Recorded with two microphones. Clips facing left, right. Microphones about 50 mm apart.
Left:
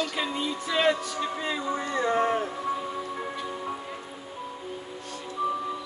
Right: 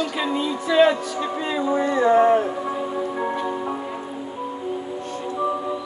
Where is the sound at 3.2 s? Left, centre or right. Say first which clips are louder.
Right 9 dB; right.